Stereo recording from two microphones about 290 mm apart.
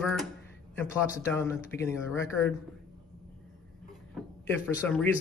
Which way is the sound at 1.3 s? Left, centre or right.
Centre.